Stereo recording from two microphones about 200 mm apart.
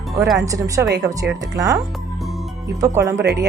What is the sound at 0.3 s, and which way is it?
A woman's voice, 15° right (ahead or behind).